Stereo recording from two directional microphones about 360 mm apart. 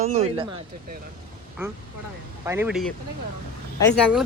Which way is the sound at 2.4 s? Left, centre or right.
Centre.